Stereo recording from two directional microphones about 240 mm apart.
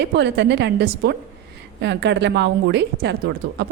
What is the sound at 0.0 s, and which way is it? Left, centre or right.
A woman's voice, right.